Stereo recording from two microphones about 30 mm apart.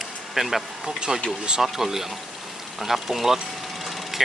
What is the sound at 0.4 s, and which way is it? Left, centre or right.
Speech, centre.